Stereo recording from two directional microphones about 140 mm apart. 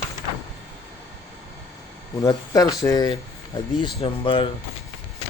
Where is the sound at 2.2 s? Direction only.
25° left (ahead or behind).